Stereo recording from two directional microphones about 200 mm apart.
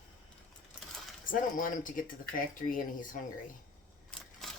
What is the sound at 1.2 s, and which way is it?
Speech, 45° left (ahead or behind).